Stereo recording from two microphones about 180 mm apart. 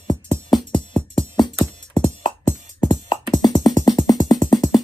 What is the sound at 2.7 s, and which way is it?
Music, 25° left (ahead or behind).